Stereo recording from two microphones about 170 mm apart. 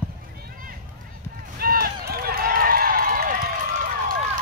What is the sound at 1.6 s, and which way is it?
Run, 60° right (ahead or behind).